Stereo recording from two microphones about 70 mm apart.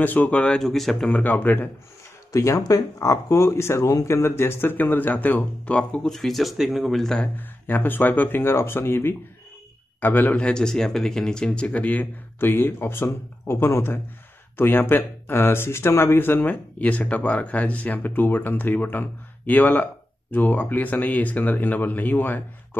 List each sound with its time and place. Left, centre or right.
0.0 s speech: left
0.6 s speech: centre
1.1 s speech: left
2.3 s speech: left; by 6.1 s centre
6.1 s speech: centre
7.2 s speech: left
10.4 s speech: centre; by 13.9 s left
14.6 s speech: left